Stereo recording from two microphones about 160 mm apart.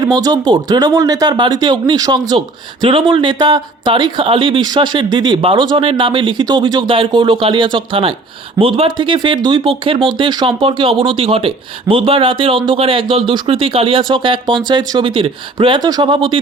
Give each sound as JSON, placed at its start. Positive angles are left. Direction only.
{"t": 0.0, "sound": "speech", "side_deg": -25}